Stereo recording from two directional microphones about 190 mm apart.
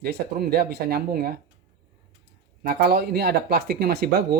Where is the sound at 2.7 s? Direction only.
55° right (ahead or behind).